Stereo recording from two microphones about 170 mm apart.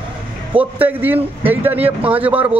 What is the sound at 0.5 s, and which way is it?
A man's voice, 10° right (ahead or behind).